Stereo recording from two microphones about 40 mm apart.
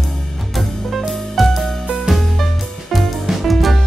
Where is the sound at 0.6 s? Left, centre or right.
Centre.